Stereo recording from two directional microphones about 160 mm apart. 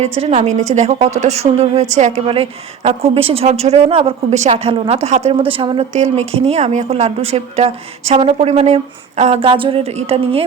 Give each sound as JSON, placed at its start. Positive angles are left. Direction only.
{"t": 0.0, "sound": "a woman's voice", "side_deg": -40}
{"t": 5.9, "sound": "a woman's voice", "side_deg": -45}